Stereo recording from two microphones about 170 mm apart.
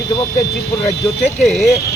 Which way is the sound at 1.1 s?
Centre (ahead or behind).